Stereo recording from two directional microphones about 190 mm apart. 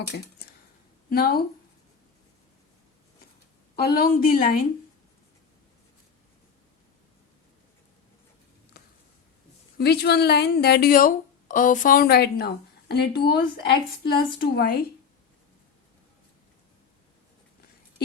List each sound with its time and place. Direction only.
1.1 s a woman's voice: 55° left (ahead or behind)
3.8 s a woman's voice: 55° left (ahead or behind)
8.7 s a sound: 60° left (ahead or behind)
9.7 s speech: 60° left (ahead or behind)